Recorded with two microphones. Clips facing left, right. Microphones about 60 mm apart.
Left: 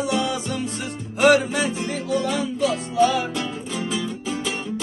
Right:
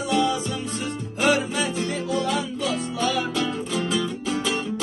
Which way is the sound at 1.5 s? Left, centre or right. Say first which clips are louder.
Left 1 dB; centre.